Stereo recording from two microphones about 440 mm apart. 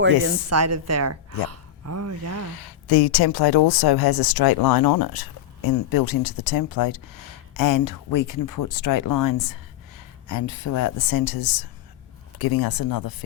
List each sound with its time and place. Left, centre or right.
0.3 s a woman's voice: right
2.8 s speech: left